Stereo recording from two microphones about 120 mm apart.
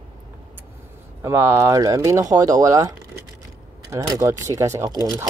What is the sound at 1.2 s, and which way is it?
Speech, 25° right (ahead or behind).